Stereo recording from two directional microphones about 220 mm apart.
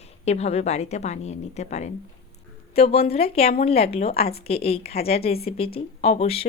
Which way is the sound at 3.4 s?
45° left (ahead or behind).